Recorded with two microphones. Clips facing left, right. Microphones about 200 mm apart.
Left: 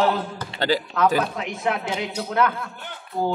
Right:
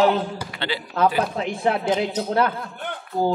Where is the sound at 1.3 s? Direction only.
30° right (ahead or behind).